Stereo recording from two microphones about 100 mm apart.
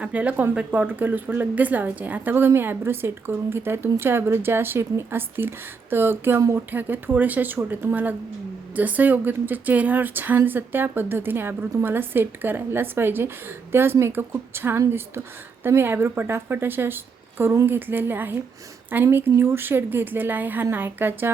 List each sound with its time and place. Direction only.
0.0 s a woman's voice: 15° right (ahead or behind)